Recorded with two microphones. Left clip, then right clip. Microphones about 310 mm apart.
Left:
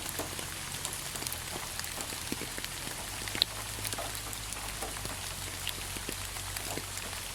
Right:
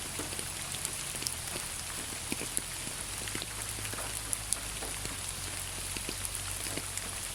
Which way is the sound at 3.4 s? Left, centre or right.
Left.